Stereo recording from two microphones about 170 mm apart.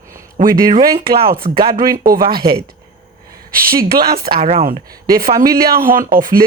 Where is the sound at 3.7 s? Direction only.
60° right (ahead or behind).